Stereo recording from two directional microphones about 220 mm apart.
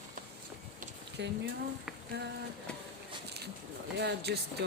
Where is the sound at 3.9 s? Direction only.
50° right (ahead or behind).